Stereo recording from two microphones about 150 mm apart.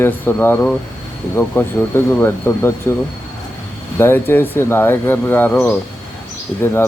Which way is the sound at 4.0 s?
15° left (ahead or behind).